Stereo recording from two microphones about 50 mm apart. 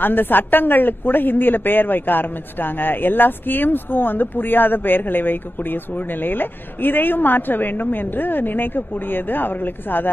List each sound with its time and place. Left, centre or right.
0.0 s a woman's voice: left